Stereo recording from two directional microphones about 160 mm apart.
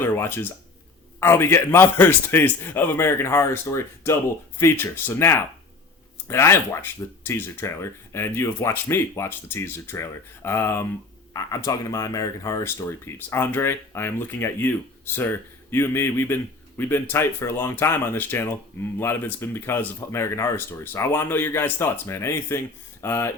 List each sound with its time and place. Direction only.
0.0 s speech: 15° left (ahead or behind)